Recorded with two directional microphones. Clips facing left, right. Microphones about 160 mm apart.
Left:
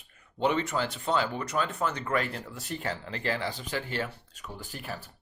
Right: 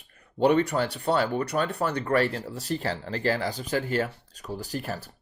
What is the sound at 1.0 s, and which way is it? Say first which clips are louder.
Speech: right 5 dB; 35° right (ahead or behind).